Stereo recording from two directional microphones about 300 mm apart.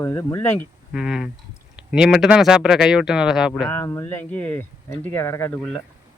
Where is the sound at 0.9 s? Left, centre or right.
Centre.